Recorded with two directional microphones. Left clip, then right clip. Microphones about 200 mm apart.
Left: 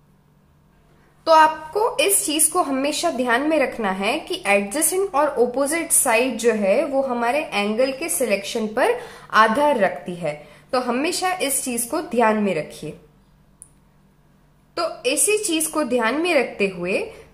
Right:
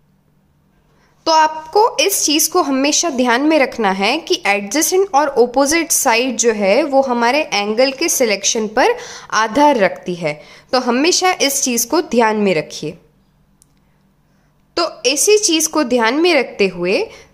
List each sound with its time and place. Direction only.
1.2 s a woman's voice: 35° right (ahead or behind)
14.7 s a woman's voice: 40° right (ahead or behind)